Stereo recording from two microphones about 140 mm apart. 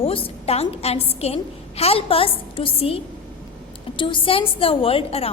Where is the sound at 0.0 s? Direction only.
40° left (ahead or behind).